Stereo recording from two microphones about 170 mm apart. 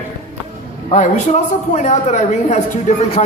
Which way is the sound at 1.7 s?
45° left (ahead or behind).